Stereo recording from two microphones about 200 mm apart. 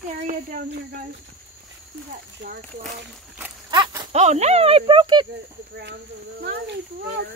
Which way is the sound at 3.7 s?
25° right (ahead or behind).